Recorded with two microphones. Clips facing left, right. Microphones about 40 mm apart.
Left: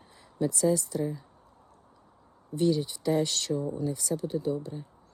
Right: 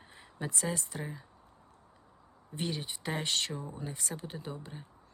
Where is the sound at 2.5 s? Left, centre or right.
Right.